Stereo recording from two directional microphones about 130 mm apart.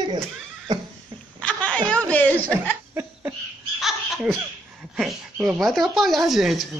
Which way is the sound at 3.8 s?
Centre (ahead or behind).